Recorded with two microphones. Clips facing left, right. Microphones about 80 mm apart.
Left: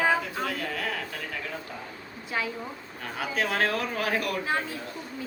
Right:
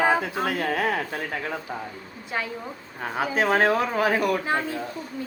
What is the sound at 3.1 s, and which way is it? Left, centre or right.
Speech, right.